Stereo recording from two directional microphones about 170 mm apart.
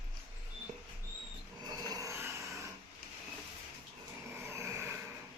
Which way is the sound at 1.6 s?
25° right (ahead or behind).